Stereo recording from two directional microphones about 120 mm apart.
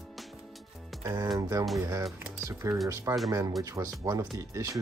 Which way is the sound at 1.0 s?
25° right (ahead or behind).